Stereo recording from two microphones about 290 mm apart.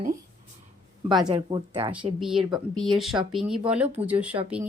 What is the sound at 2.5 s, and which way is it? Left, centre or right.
Speech, centre.